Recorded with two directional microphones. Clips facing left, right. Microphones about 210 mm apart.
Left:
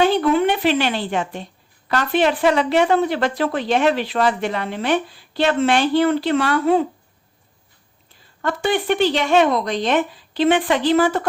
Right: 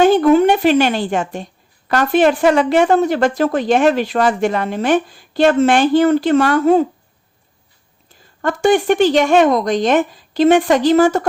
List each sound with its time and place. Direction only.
0.0 s a woman's voice: 45° right (ahead or behind)
8.4 s a woman's voice: 45° right (ahead or behind)